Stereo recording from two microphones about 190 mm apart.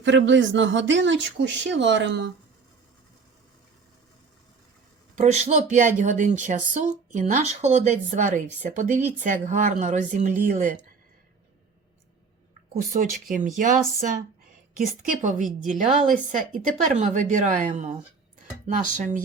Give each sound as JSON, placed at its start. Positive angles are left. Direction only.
{"t": 0.0, "sound": "speech", "side_deg": -75}
{"t": 5.1, "sound": "a woman's voice", "side_deg": -40}
{"t": 12.7, "sound": "a woman's voice", "side_deg": -45}